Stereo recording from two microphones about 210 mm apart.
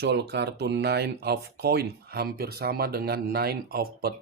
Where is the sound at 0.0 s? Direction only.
55° right (ahead or behind).